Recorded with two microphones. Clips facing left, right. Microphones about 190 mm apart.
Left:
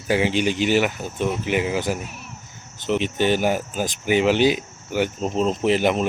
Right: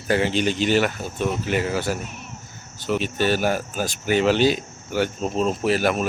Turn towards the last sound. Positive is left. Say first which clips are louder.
# left 2 dB
turn(degrees=20)  # may be behind; listen again after turning